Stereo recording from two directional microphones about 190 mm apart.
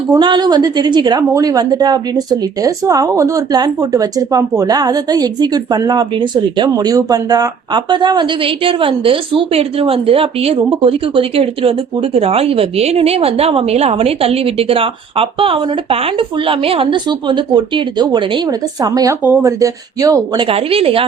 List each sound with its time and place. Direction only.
0.1 s a woman's voice: 25° right (ahead or behind)